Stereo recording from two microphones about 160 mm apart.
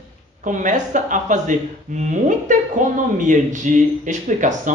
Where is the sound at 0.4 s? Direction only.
55° right (ahead or behind).